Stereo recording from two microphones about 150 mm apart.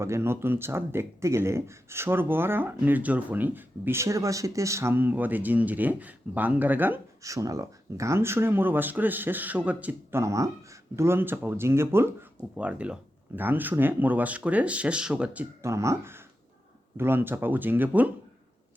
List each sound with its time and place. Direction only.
0.0 s speech: 15° right (ahead or behind)